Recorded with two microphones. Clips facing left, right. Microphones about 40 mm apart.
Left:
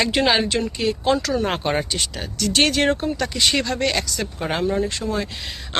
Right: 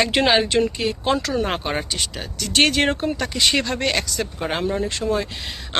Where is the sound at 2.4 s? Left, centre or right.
Right.